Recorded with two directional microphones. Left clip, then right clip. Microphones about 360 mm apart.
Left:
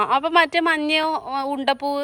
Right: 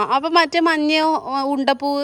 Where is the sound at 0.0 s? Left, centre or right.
Centre.